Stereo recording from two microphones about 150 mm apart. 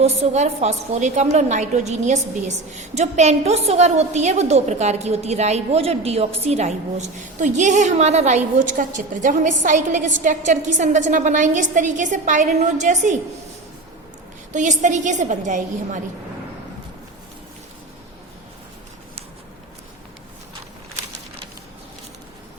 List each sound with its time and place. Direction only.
0.0 s a woman's voice: 45° right (ahead or behind)
14.5 s a woman's voice: 55° right (ahead or behind)